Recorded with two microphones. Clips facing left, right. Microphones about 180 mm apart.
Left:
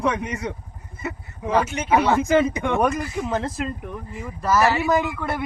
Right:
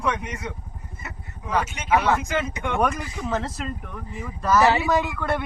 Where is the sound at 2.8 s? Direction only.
15° left (ahead or behind).